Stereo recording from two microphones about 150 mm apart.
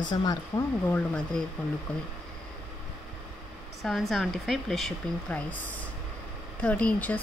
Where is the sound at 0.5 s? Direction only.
10° left (ahead or behind).